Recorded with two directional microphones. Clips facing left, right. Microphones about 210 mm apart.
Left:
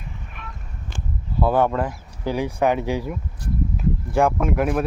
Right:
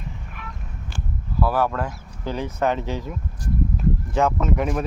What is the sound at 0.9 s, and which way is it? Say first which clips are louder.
Speech: left 1 dB; 20° left (ahead or behind).